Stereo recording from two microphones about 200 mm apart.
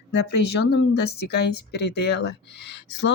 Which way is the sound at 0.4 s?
55° left (ahead or behind).